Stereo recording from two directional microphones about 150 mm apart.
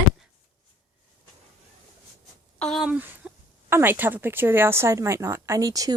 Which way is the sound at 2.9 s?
10° right (ahead or behind).